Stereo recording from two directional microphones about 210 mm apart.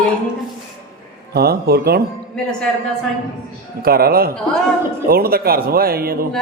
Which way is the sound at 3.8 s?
45° right (ahead or behind).